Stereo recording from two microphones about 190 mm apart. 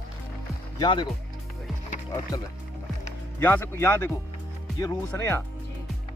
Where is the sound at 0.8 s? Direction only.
25° left (ahead or behind).